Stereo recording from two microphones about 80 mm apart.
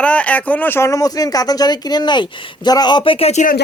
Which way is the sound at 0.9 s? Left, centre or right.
Left.